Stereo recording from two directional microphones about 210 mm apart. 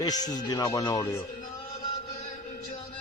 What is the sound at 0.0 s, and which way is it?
Speech, 20° left (ahead or behind).